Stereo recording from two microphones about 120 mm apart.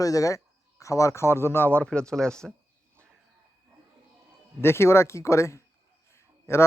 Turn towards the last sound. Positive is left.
turn(degrees=20)  # may be behind; listen again after turning